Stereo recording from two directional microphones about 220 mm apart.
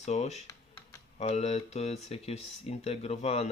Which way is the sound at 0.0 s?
30° left (ahead or behind).